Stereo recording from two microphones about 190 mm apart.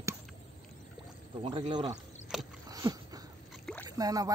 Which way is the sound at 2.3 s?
Centre (ahead or behind).